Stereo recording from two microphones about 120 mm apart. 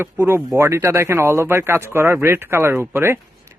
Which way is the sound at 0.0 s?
20° right (ahead or behind).